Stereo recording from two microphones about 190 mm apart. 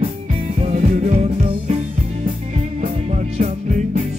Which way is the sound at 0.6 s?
35° right (ahead or behind).